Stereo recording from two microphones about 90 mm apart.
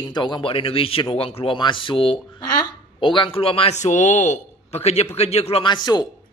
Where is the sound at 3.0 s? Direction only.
65° left (ahead or behind); by 3.7 s 90° left.